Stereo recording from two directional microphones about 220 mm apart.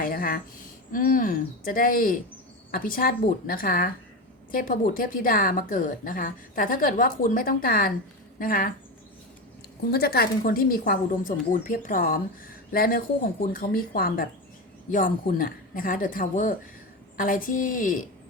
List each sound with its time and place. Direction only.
0.0 s a woman's voice: 40° left (ahead or behind)
9.9 s a woman's voice: 45° left (ahead or behind)